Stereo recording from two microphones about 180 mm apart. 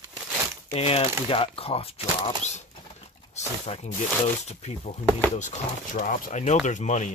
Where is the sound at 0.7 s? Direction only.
35° left (ahead or behind).